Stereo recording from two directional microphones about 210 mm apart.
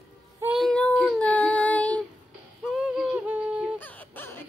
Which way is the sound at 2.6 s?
5° right (ahead or behind).